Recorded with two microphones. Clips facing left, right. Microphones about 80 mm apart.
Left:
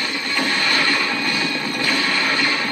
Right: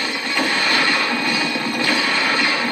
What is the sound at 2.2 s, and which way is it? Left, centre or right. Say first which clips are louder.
Vehicle: right 1 dB; centre.